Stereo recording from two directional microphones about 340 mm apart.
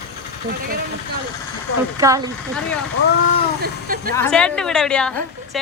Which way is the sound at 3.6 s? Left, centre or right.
Right.